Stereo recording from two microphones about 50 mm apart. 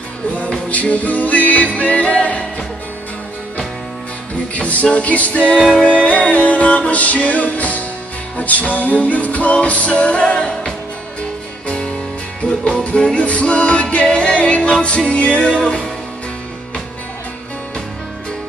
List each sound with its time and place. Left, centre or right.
0.4 s music: left
4.6 s music: left
5.6 s music: centre
5.9 s music: left